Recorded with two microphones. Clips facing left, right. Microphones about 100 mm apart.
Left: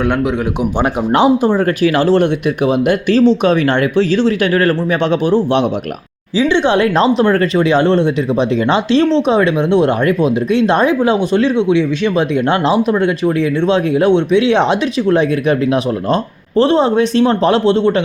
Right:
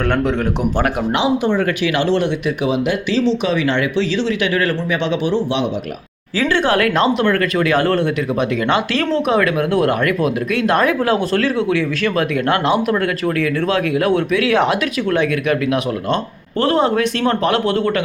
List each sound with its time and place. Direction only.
0.0 s a man's voice: 10° left (ahead or behind)
1.1 s speech: 40° left (ahead or behind)
6.3 s speech: 20° left (ahead or behind)